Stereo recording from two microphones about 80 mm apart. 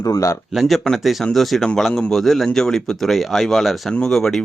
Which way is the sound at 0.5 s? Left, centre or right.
Centre.